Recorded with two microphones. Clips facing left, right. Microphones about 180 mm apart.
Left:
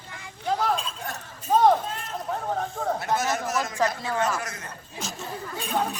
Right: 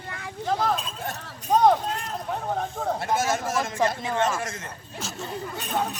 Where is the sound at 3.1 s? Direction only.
25° right (ahead or behind).